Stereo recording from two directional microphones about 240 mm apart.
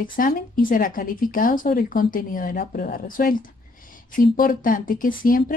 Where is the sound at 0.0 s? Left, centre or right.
Left.